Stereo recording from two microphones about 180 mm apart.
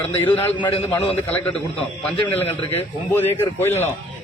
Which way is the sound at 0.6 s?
30° left (ahead or behind).